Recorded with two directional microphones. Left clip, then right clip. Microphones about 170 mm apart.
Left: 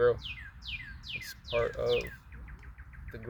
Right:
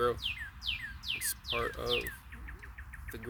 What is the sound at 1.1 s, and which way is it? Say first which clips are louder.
Speech: left 5 dB; 55° right (ahead or behind).